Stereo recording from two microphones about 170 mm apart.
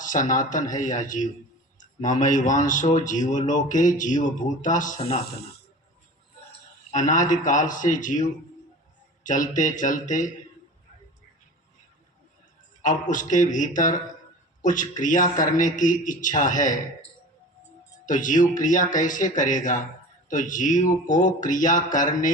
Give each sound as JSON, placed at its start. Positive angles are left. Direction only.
{"t": 0.0, "sound": "speech", "side_deg": 50}
{"t": 6.9, "sound": "speech", "side_deg": 50}
{"t": 12.8, "sound": "speech", "side_deg": 50}
{"t": 18.0, "sound": "speech", "side_deg": 50}